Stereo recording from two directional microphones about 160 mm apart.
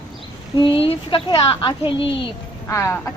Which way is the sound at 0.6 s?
35° left (ahead or behind).